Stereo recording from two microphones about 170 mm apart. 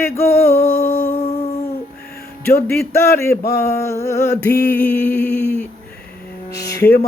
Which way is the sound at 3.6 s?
15° left (ahead or behind).